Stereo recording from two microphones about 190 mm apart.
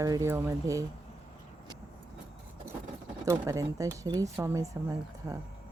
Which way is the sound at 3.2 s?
15° right (ahead or behind).